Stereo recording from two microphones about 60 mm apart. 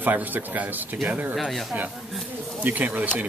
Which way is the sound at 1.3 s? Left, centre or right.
Centre.